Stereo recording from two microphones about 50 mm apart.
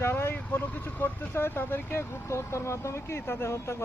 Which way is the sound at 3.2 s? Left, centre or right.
Left.